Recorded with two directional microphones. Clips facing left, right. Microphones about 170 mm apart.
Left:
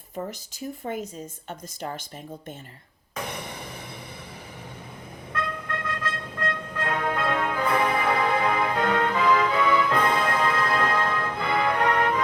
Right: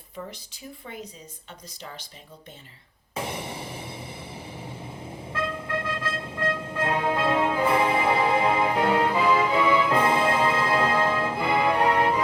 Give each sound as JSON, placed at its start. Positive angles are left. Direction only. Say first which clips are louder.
{"t": 0.8, "sound": "speech", "louder": "left 8 dB", "side_deg": 40}
{"t": 3.2, "sound": "music", "louder": "right 2 dB", "side_deg": -25}
{"t": 5.3, "sound": "music", "louder": "right 2 dB", "side_deg": -25}